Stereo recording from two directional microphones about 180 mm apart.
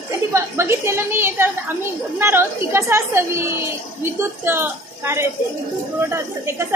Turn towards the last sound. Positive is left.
turn(degrees=-15)  # may be behind; listen again after turning